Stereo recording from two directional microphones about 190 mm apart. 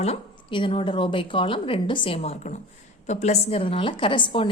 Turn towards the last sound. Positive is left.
turn(degrees=25)  # may be behind; listen again after turning